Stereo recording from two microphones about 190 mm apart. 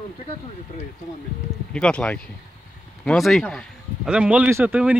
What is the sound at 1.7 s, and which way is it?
Speech, 5° left (ahead or behind).